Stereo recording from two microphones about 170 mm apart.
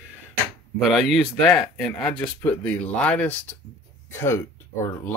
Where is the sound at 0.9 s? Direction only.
Centre (ahead or behind).